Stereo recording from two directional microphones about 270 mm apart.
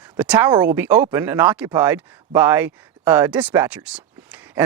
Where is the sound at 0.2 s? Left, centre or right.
Centre.